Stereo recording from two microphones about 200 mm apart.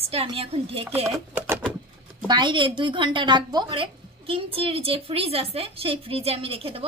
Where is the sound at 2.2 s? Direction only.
25° right (ahead or behind).